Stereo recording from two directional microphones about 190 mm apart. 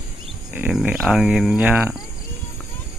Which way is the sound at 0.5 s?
5° right (ahead or behind).